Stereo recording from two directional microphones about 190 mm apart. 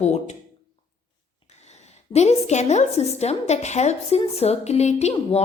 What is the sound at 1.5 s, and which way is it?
A woman's voice, 35° left (ahead or behind).